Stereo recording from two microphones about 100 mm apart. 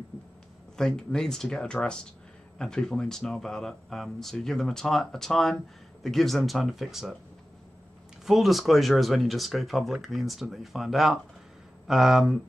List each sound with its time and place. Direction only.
0.7 s speech: 5° left (ahead or behind)
8.3 s speech: centre (ahead or behind)